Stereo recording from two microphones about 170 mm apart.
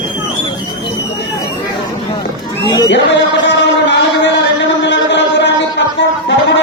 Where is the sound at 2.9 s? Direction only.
90° left.